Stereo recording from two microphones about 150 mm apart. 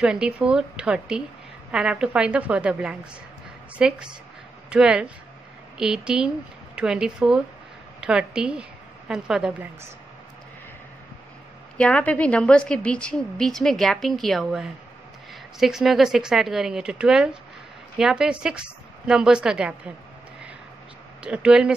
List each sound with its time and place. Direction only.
0.0 s a woman's voice: 5° right (ahead or behind)
11.7 s a woman's voice: 10° left (ahead or behind)
21.2 s a woman's voice: 5° right (ahead or behind)